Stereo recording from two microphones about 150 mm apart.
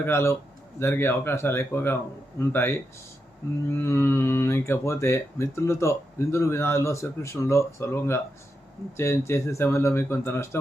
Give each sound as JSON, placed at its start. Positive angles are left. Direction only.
{"t": 0.0, "sound": "speech", "side_deg": 15}